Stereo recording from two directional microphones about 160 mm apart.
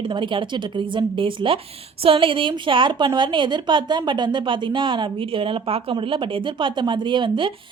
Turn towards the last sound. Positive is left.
turn(degrees=-30)  # may be behind; listen again after turning